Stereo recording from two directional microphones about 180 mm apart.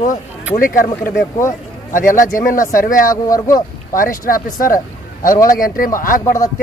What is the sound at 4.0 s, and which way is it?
Speech, 50° left (ahead or behind).